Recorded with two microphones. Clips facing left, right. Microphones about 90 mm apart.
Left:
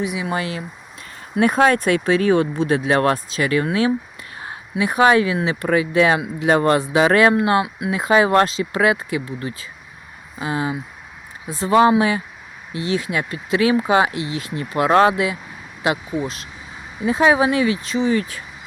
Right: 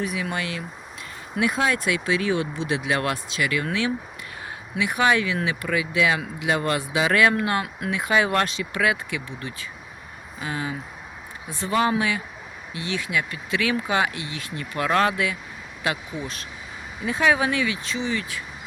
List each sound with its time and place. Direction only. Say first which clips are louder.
0.0 s speech: left 4 dB; 20° left (ahead or behind)
0.3 s speech: left 5 dB; 30° left (ahead or behind)
1.4 s speech: left 7 dB; 45° left (ahead or behind); by 7.6 s 30° left (ahead or behind)
7.6 s speech: left 5 dB; 15° left (ahead or behind)
7.9 s speech: left 7 dB; 30° left (ahead or behind)